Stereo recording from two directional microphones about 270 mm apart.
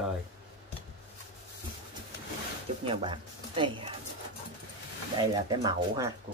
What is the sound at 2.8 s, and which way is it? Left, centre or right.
Speech, centre.